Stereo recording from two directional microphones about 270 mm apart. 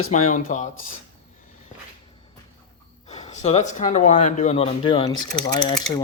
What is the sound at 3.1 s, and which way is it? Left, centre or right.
Speech, left.